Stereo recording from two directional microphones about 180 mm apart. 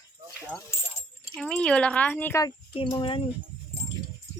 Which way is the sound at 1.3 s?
5° left (ahead or behind).